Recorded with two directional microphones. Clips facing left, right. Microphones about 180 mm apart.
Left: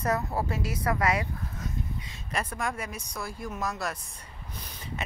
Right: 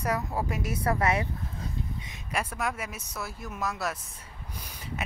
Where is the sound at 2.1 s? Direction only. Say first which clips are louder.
Right 1 dB; 5° right (ahead or behind).